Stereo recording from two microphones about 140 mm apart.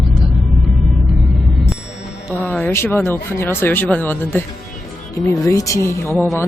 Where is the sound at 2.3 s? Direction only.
15° left (ahead or behind).